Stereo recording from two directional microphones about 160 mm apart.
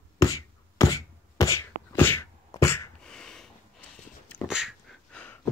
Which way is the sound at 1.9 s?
15° left (ahead or behind).